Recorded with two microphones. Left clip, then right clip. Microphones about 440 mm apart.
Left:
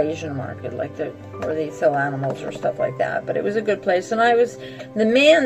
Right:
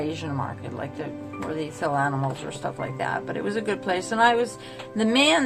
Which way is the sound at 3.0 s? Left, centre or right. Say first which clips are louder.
Left 6 dB; centre.